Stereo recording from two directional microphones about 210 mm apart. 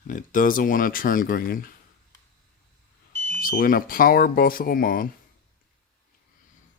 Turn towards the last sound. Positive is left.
turn(degrees=45)  # may be behind; listen again after turning